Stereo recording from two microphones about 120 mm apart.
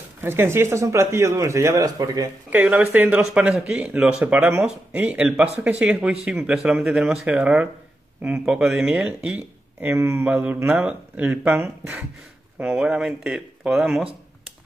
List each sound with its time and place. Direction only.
0.2 s speech: 20° right (ahead or behind)
2.5 s speech: 10° right (ahead or behind)
7.2 s speech: 15° right (ahead or behind)
12.5 s speech: 10° right (ahead or behind)